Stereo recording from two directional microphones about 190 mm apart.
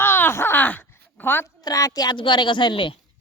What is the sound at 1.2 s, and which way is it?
A woman's voice, 10° left (ahead or behind).